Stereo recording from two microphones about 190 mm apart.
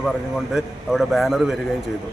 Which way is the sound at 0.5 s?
Centre (ahead or behind).